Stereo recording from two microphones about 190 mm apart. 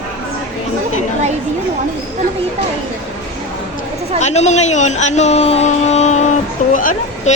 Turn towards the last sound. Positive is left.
turn(degrees=45)  # may be behind; listen again after turning